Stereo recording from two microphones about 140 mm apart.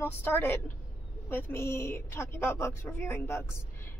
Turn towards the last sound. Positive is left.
turn(degrees=20)  # may be behind; listen again after turning